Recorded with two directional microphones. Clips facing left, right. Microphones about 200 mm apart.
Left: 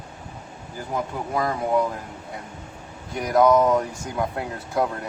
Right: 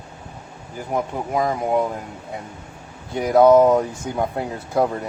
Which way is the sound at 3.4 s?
30° right (ahead or behind).